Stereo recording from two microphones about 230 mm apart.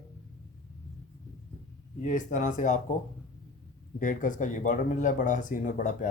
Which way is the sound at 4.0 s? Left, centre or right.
Left.